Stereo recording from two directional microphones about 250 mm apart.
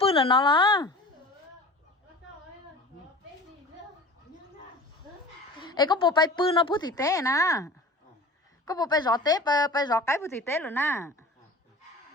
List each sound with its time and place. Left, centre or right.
0.0 s speech: left
5.5 s a woman's voice: centre